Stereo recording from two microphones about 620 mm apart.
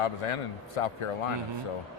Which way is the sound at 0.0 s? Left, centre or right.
Left.